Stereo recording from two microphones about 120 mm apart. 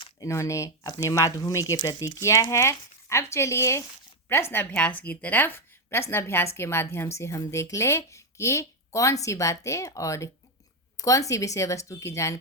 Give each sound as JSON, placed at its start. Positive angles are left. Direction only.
{"t": 0.2, "sound": "a woman's voice", "side_deg": 25}